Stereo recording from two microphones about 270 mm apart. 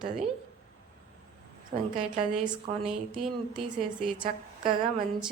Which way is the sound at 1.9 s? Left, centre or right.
Centre.